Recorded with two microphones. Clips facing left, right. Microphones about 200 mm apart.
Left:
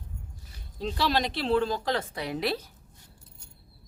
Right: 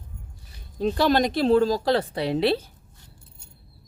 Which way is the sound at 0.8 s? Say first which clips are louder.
Right 7 dB; 50° right (ahead or behind).